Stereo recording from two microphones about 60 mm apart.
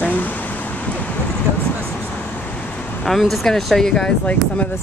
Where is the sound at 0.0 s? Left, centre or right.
Left.